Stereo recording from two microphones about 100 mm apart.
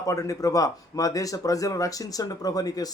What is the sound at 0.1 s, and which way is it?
Speech, 35° left (ahead or behind).